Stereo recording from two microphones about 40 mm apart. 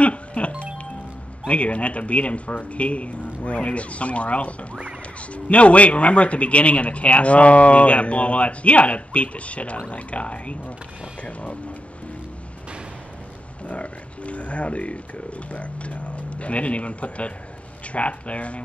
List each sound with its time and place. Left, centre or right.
0.0 s music: left
1.5 s a man's voice: left
13.7 s a man's voice: left